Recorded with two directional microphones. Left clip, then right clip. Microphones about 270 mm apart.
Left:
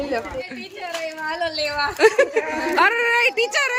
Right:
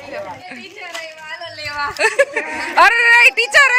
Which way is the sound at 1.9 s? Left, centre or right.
Centre.